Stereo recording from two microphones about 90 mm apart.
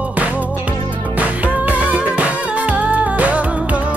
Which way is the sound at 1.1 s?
15° right (ahead or behind).